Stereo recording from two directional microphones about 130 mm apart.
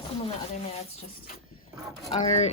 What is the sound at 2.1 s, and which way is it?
Speech, 60° left (ahead or behind).